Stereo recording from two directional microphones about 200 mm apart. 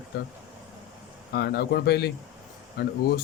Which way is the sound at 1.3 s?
55° left (ahead or behind).